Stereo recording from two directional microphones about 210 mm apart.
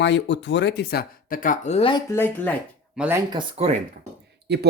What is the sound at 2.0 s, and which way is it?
Speech, 10° left (ahead or behind).